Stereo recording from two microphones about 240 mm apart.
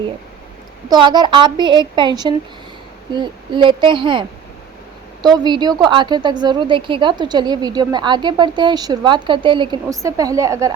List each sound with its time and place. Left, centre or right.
0.9 s a woman's voice: centre
5.3 s a woman's voice: centre